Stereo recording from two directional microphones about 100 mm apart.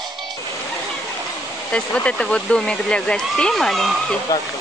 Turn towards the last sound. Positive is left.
turn(degrees=35)  # may be behind; listen again after turning